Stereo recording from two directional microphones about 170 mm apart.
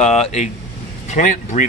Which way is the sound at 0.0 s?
40° left (ahead or behind).